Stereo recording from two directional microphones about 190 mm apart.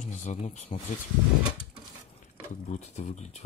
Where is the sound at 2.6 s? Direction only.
40° left (ahead or behind).